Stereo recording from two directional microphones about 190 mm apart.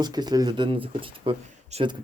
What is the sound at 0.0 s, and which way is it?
Speech, 20° right (ahead or behind).